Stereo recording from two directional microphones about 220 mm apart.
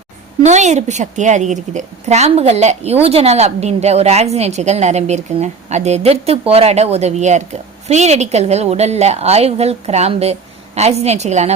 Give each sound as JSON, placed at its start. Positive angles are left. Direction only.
{"t": 0.4, "sound": "a woman's voice", "side_deg": -30}